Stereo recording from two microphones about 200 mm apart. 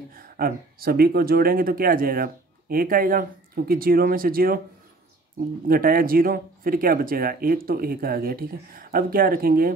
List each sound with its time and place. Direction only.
0.1 s speech: 45° right (ahead or behind)
5.7 s speech: 45° right (ahead or behind)